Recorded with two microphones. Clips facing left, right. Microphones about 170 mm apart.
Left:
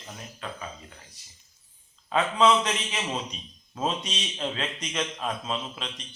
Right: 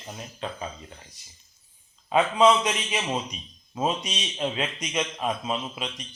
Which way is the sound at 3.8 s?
10° right (ahead or behind).